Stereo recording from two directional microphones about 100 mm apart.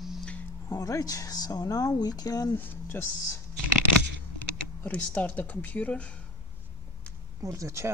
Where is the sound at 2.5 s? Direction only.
20° left (ahead or behind).